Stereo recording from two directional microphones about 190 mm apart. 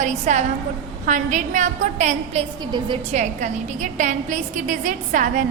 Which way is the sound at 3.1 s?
40° right (ahead or behind).